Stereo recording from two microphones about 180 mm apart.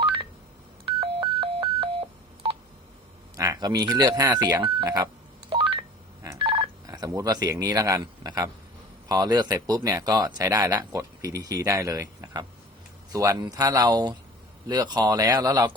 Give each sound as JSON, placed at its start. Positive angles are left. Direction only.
{"t": 1.0, "sound": "telephone dialing", "side_deg": -30}
{"t": 3.3, "sound": "speech", "side_deg": -20}
{"t": 5.5, "sound": "telephone dialing", "side_deg": -30}
{"t": 6.4, "sound": "speech", "side_deg": -25}